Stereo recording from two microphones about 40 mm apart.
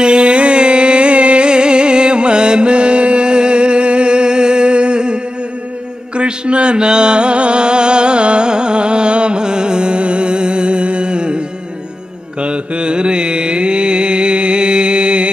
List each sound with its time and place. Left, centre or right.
0.0 s music: right
12.4 s mantra: right